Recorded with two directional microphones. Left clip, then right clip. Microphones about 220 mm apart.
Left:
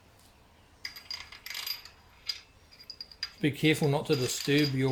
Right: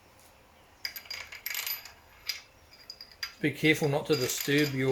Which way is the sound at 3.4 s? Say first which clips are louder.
Right 1 dB; 35° left (ahead or behind).